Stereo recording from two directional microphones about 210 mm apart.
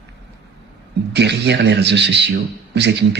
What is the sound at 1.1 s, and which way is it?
Speech, 55° right (ahead or behind).